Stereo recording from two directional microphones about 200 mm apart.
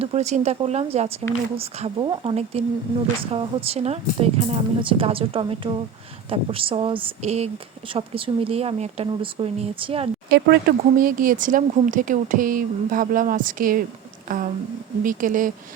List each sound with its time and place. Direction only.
0.0 s a woman's voice: 30° right (ahead or behind)
10.2 s speech: 55° right (ahead or behind)
11.0 s speech: 45° right (ahead or behind)